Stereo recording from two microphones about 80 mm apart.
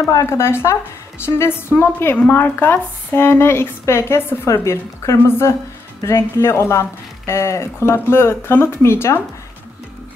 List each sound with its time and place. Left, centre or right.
0.1 s a woman's voice: left